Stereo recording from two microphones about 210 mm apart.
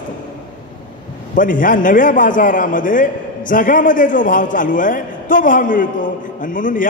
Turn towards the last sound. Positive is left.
turn(degrees=40)  # may be behind; listen again after turning